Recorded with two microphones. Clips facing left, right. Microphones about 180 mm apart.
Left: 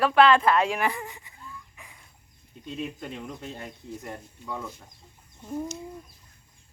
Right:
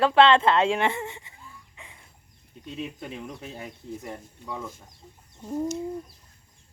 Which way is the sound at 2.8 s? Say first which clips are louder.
Even; 5° right (ahead or behind).